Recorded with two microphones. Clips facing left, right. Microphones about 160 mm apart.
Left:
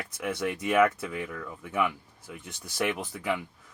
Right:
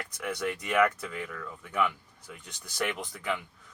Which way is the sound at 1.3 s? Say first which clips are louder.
Left 2 dB; 20° left (ahead or behind).